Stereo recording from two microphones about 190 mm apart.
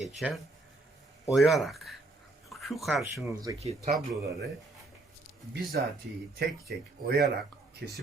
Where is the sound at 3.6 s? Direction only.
35° right (ahead or behind).